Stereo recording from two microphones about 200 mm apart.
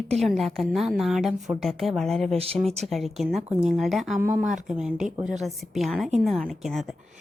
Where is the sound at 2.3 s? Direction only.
30° right (ahead or behind).